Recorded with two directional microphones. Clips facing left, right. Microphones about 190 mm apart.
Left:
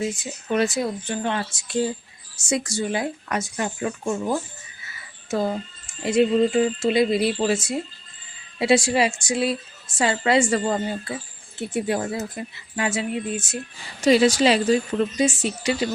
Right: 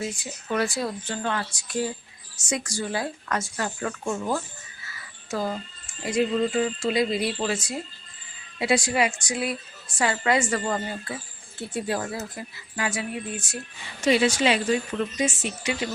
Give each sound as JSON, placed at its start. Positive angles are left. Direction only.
{"t": 0.0, "sound": "speech", "side_deg": 20}
{"t": 4.9, "sound": "music", "side_deg": 25}
{"t": 6.1, "sound": "speech", "side_deg": 25}
{"t": 14.0, "sound": "speech", "side_deg": 35}